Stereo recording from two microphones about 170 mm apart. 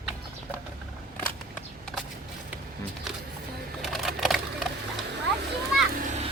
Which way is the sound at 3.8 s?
Centre (ahead or behind).